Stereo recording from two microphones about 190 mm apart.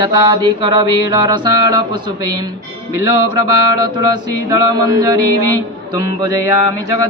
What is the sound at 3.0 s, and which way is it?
Speech, 20° right (ahead or behind).